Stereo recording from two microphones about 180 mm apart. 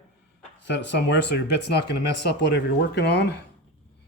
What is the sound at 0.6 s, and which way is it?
Speech, 75° left (ahead or behind).